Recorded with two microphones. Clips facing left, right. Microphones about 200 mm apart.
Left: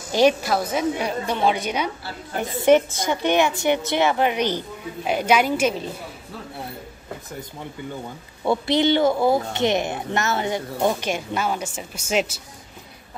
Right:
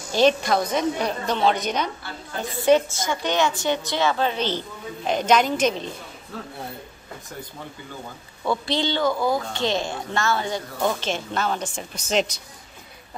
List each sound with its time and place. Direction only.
0.1 s a woman's voice: 10° left (ahead or behind)
8.5 s speech: 20° left (ahead or behind)